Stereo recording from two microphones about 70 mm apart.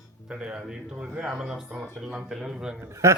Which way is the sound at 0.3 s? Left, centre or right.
Centre.